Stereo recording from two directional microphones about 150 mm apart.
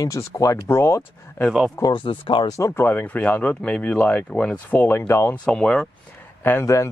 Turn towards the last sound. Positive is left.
turn(degrees=20)  # may be behind; listen again after turning